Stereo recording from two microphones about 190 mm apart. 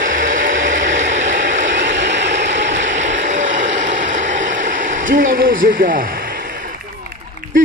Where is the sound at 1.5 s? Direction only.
70° right (ahead or behind).